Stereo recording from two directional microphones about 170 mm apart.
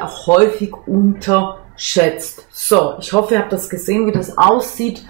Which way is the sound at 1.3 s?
15° left (ahead or behind).